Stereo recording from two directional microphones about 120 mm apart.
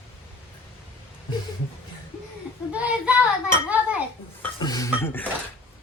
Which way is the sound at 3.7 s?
10° right (ahead or behind).